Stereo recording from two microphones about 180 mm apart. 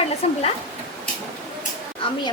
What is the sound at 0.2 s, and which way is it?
Speech, 35° left (ahead or behind).